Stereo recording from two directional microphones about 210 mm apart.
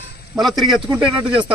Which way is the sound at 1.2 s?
25° right (ahead or behind).